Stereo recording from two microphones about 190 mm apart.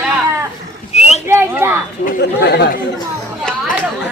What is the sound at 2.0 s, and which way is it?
Speech, 60° left (ahead or behind).